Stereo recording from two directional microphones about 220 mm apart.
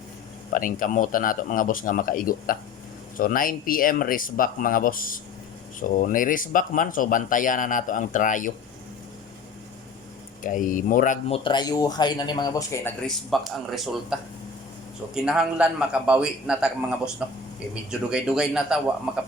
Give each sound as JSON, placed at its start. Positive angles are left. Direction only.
{"t": 0.5, "sound": "speech", "side_deg": 35}
{"t": 10.4, "sound": "speech", "side_deg": 35}
{"t": 11.4, "sound": "speech", "side_deg": 20}
{"t": 13.1, "sound": "a man's voice", "side_deg": 0}